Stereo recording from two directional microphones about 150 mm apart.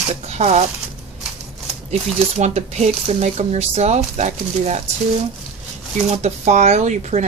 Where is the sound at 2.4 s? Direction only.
50° right (ahead or behind).